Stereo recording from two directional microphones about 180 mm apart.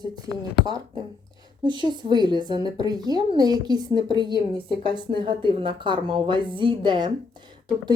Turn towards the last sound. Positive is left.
turn(degrees=-25)  # may be behind; listen again after turning